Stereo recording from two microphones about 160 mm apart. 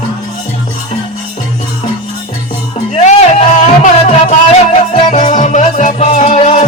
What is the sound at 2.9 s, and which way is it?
Music, 45° left (ahead or behind).